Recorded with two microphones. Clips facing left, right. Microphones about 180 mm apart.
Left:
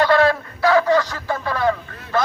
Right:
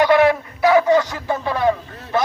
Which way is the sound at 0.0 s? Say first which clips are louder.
Right 2 dB; 15° right (ahead or behind).